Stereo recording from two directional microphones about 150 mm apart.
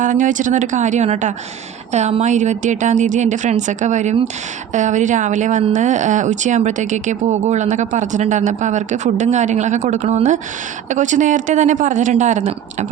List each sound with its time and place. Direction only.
0.0 s a woman's voice: 60° right (ahead or behind)